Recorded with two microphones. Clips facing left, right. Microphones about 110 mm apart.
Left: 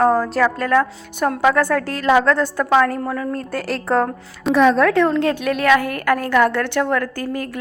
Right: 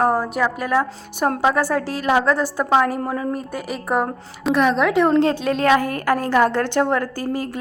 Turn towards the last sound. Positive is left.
turn(degrees=-25)  # may be behind; listen again after turning